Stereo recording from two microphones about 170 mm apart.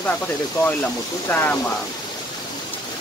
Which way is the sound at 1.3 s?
10° left (ahead or behind).